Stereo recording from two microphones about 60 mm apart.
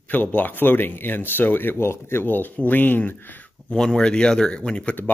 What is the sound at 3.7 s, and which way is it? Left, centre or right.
Speech, centre.